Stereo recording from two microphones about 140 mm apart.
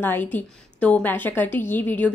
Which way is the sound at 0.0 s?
15° left (ahead or behind).